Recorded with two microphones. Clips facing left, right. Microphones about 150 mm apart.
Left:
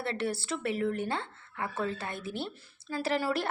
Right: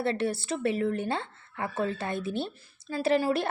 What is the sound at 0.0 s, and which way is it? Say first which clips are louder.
Speech: right 4 dB; 20° right (ahead or behind).